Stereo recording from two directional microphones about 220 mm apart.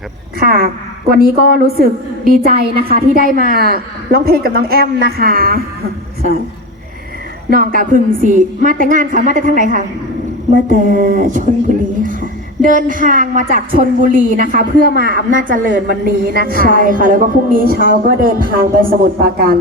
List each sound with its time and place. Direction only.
0.3 s a woman's voice: 40° right (ahead or behind)
7.5 s a woman's voice: 40° right (ahead or behind)
12.6 s a woman's voice: 35° right (ahead or behind)